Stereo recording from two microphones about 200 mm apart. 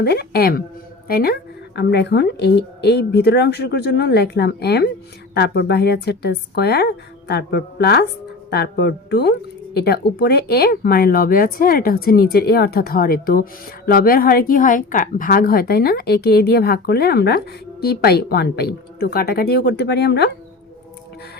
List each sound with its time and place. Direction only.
0.0 s a woman's voice: 55° left (ahead or behind)